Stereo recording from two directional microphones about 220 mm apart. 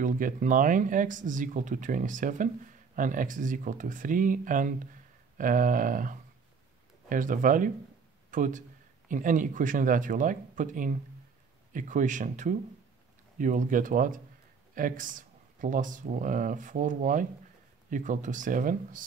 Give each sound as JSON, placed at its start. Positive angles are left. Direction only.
{"t": 0.0, "sound": "speech", "side_deg": -35}